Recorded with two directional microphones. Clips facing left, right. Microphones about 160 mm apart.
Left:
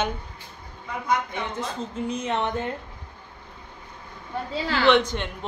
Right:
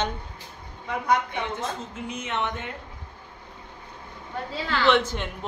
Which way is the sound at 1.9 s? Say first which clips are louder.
Left 5 dB; 35° left (ahead or behind).